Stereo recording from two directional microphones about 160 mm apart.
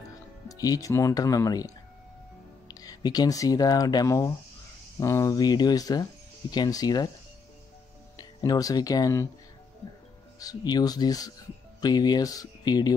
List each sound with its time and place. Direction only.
0.5 s speech: 25° left (ahead or behind)
2.7 s speech: 25° left (ahead or behind)
8.2 s speech: 25° left (ahead or behind)
10.4 s speech: 25° left (ahead or behind)